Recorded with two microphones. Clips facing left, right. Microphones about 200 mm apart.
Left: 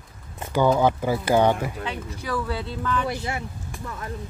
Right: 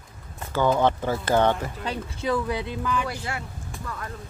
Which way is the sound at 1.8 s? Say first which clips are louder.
Even; 35° right (ahead or behind).